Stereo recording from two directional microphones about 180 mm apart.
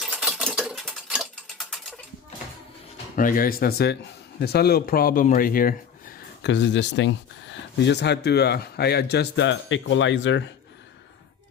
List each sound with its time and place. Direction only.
0.0 s a sound: 5° right (ahead or behind)
3.2 s speech: 50° left (ahead or behind)
6.4 s speech: 80° left